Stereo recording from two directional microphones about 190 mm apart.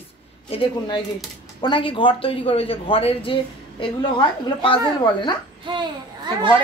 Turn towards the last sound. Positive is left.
turn(degrees=-25)  # may be behind; listen again after turning